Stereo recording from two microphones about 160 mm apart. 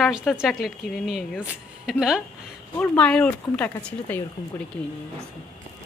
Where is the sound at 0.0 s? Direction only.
Centre (ahead or behind).